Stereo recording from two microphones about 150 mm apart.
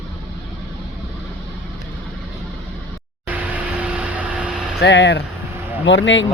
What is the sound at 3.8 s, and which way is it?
Vehicle, 10° right (ahead or behind).